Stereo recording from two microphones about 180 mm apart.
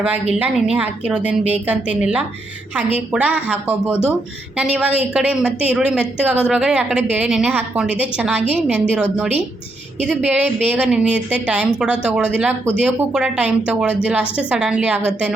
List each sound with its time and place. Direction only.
0.3 s a woman's voice: 10° right (ahead or behind)